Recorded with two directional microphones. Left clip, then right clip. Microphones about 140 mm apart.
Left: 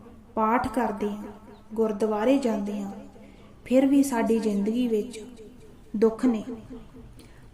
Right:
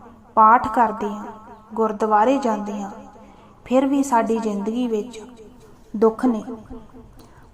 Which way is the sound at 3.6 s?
30° left (ahead or behind).